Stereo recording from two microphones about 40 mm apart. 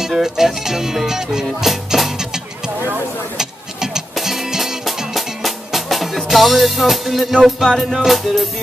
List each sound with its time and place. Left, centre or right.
0.0 s speech: centre
1.7 s music: centre
3.3 s a sound: centre
4.1 s music: centre
7.9 s speech: centre